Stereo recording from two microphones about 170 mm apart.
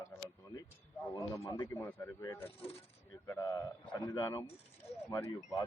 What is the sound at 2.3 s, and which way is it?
Speech, 35° left (ahead or behind).